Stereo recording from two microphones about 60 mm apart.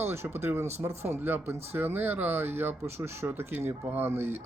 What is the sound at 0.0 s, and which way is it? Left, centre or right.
Speech, right.